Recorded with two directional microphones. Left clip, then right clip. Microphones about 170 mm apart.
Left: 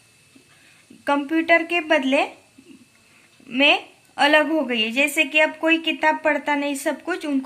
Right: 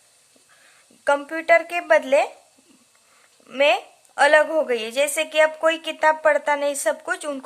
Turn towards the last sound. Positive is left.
turn(degrees=-50)  # may be behind; listen again after turning